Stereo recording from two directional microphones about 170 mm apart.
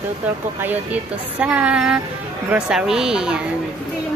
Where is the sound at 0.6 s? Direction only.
10° right (ahead or behind).